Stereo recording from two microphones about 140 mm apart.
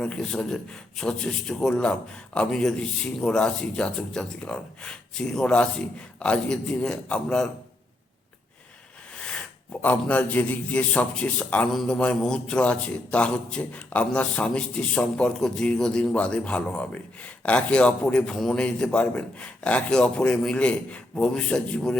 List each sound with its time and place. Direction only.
0.0 s a man's voice: 5° left (ahead or behind)
9.1 s a sound: 5° left (ahead or behind)
9.8 s a man's voice: 10° left (ahead or behind)